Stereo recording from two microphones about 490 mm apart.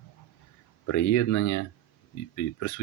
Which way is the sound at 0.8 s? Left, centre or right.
Left.